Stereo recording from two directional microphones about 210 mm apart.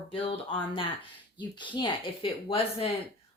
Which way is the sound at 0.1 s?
25° left (ahead or behind).